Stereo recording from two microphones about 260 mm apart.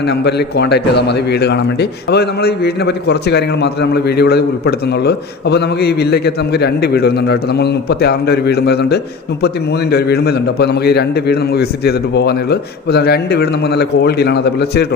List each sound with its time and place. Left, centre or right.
0.1 s a man's voice: left